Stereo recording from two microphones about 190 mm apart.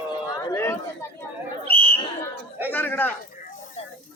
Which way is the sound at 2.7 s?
10° left (ahead or behind).